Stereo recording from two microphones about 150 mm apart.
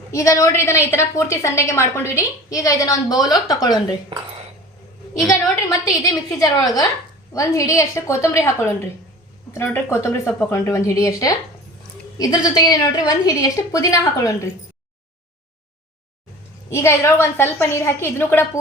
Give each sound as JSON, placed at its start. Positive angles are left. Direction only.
{"t": 0.1, "sound": "a woman's voice", "side_deg": 20}
{"t": 5.3, "sound": "a woman's voice", "side_deg": 25}
{"t": 9.5, "sound": "a woman's voice", "side_deg": 15}
{"t": 16.6, "sound": "a woman's voice", "side_deg": 20}